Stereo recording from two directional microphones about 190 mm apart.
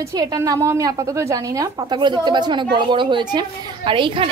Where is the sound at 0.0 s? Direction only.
20° right (ahead or behind).